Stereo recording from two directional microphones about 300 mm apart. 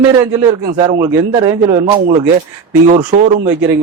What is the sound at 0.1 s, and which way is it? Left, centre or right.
A man's voice, centre.